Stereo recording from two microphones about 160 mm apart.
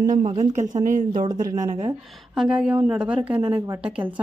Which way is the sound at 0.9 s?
55° right (ahead or behind).